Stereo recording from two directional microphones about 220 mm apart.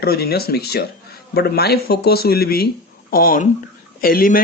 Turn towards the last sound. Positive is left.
turn(degrees=40)  # may be behind; listen again after turning